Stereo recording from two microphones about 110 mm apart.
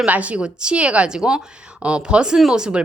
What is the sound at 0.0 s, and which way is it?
Speech, 10° right (ahead or behind).